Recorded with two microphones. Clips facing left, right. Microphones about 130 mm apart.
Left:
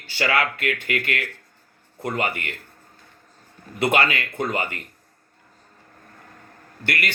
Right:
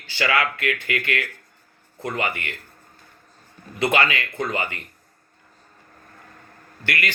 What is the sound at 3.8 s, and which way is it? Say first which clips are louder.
Speech: even; 30° left (ahead or behind).